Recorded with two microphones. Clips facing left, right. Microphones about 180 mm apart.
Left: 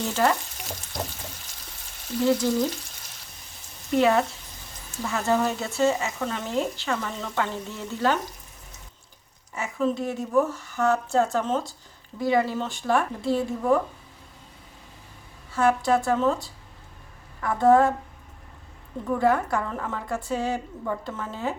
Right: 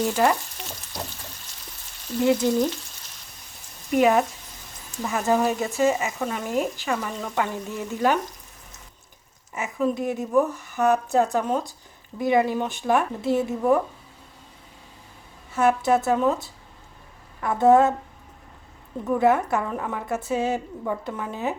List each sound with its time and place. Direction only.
0.2 s speech: 10° right (ahead or behind)
2.2 s speech: 20° right (ahead or behind)
3.9 s speech: 15° right (ahead or behind)
9.8 s a woman's voice: 15° right (ahead or behind)
15.5 s a woman's voice: 20° right (ahead or behind)
19.0 s a woman's voice: 20° right (ahead or behind)